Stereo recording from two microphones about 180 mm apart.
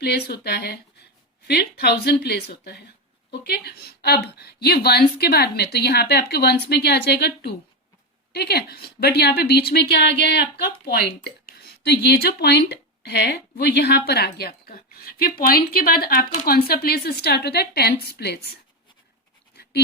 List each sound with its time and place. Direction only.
0.0 s a woman's voice: 65° left (ahead or behind)